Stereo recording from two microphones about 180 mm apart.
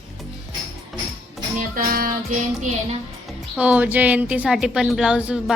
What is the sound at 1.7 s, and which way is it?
Speech, 55° right (ahead or behind).